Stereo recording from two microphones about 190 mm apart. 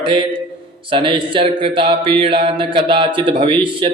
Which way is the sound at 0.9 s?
25° right (ahead or behind).